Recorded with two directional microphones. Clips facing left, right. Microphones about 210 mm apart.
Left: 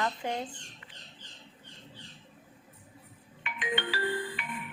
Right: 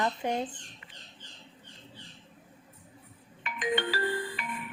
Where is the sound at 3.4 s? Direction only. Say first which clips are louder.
Right 4 dB; 40° right (ahead or behind).